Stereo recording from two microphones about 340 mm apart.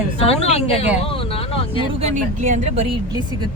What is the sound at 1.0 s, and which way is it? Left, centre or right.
Vehicle, centre.